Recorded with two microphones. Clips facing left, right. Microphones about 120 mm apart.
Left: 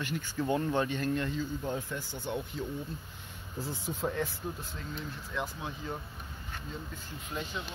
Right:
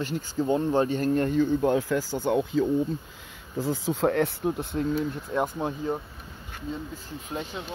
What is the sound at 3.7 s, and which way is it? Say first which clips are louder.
Speech: right 10 dB; 90° right.